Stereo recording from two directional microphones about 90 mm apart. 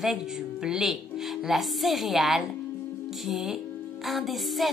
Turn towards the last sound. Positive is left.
turn(degrees=0)  # may be behind; listen again after turning